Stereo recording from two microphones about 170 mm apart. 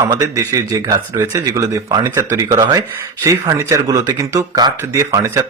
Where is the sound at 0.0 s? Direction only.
20° right (ahead or behind).